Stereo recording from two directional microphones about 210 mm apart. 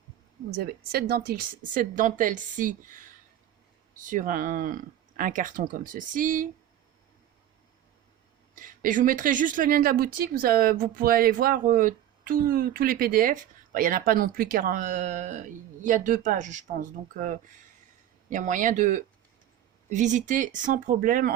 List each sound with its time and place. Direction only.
0.5 s speech: 45° right (ahead or behind)
8.5 s speech: 40° right (ahead or behind)